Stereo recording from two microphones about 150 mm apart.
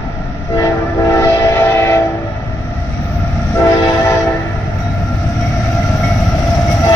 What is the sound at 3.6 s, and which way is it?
Train horn, 20° left (ahead or behind).